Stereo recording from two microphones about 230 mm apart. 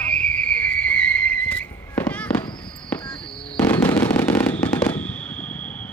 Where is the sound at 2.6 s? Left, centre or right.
Centre.